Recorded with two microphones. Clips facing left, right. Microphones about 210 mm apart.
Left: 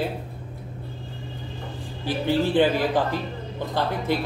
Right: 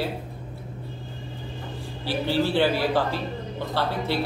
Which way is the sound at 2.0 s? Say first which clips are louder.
Left 1 dB; 15° left (ahead or behind).